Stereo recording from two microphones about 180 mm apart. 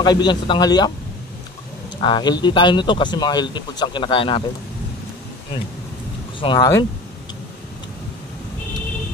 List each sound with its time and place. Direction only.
0.0 s speech: 25° left (ahead or behind)
2.0 s speech: 25° left (ahead or behind)
6.4 s speech: 25° left (ahead or behind)